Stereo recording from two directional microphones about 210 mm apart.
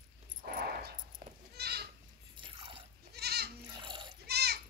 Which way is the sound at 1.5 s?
50° right (ahead or behind).